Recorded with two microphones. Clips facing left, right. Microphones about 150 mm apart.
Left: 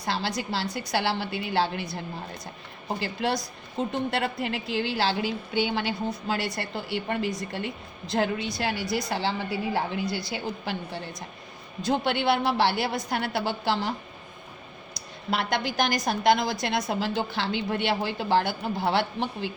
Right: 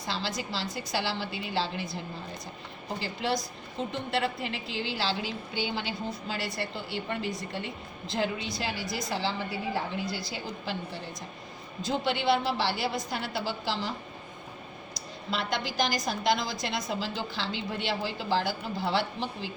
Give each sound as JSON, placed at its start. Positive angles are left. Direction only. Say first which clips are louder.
{"t": 0.0, "sound": "a woman's voice", "louder": "left 4 dB", "side_deg": 65}
{"t": 3.0, "sound": "a woman's voice", "louder": "left 2 dB", "side_deg": 65}
{"t": 8.1, "sound": "a woman's voice", "louder": "left 4 dB", "side_deg": 65}
{"t": 15.3, "sound": "a woman's voice", "louder": "left 4 dB", "side_deg": 65}